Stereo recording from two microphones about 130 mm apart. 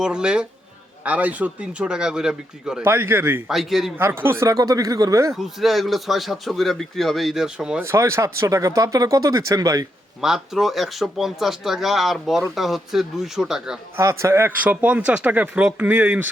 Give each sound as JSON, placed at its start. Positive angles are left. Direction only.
{"t": 0.0, "sound": "speech", "side_deg": -5}
{"t": 2.8, "sound": "speech", "side_deg": -20}
{"t": 3.5, "sound": "speech", "side_deg": 0}
{"t": 3.9, "sound": "speech", "side_deg": -15}
{"t": 5.3, "sound": "speech", "side_deg": 0}
{"t": 7.9, "sound": "speech", "side_deg": -20}
{"t": 10.2, "sound": "speech", "side_deg": -5}
{"t": 13.9, "sound": "speech", "side_deg": -20}